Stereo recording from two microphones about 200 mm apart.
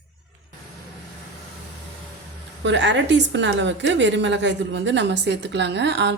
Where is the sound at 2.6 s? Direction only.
65° right (ahead or behind).